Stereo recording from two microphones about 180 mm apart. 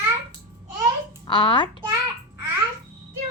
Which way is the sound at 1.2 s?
25° left (ahead or behind).